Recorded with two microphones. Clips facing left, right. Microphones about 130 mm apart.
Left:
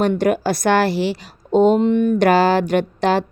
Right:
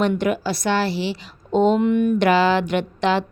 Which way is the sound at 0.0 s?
40° left (ahead or behind).